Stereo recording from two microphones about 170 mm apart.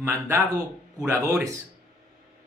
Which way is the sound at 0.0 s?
15° right (ahead or behind).